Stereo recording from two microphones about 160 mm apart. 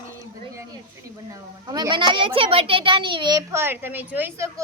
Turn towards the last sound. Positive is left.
turn(degrees=-15)  # may be behind; listen again after turning